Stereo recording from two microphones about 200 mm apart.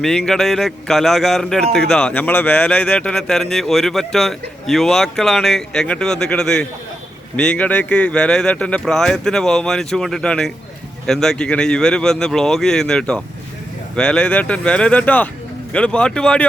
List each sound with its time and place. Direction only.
0.0 s a man's voice: centre (ahead or behind)